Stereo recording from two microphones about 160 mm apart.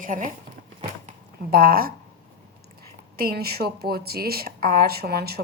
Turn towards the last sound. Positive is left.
turn(degrees=-75)  # may be behind; listen again after turning